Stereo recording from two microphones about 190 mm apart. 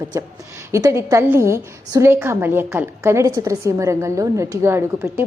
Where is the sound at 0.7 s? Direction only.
15° right (ahead or behind).